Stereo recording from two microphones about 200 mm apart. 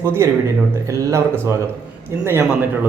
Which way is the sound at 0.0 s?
15° right (ahead or behind).